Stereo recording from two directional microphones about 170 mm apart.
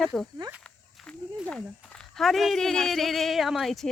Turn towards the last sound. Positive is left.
turn(degrees=0)  # may be behind; listen again after turning